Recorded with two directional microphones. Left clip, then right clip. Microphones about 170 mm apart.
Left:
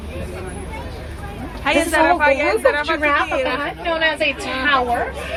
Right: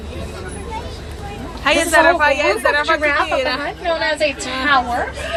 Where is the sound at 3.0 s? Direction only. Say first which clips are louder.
Right 1 dB; 45° left (ahead or behind).